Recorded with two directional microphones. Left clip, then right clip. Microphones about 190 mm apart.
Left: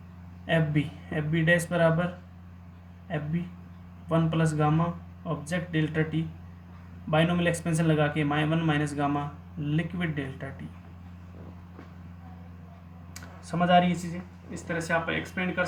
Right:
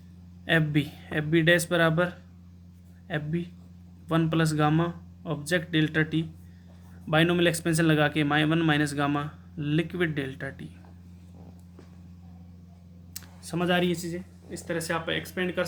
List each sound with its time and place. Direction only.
0.4 s speech: 45° right (ahead or behind)
4.1 s speech: 45° right (ahead or behind)
7.1 s speech: 40° right (ahead or behind)
13.1 s speech: 30° right (ahead or behind)